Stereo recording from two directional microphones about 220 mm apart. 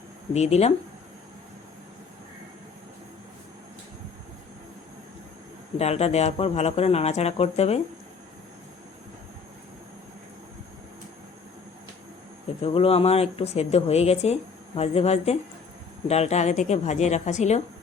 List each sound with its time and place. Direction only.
0.3 s speech: 30° left (ahead or behind)
5.7 s speech: 30° left (ahead or behind)
12.6 s speech: 25° left (ahead or behind)